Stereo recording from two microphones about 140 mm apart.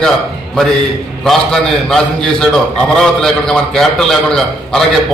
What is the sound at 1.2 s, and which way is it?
A man's voice, 5° left (ahead or behind).